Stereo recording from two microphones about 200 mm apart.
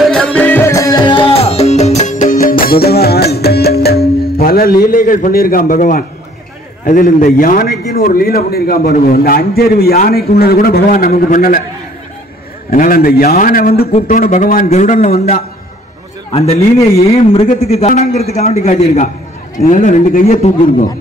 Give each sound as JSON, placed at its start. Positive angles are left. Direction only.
{"t": 0.1, "sound": "music", "side_deg": 5}
{"t": 4.4, "sound": "a man's voice", "side_deg": 50}
{"t": 12.7, "sound": "a man's voice", "side_deg": 45}
{"t": 16.9, "sound": "a man's voice", "side_deg": 30}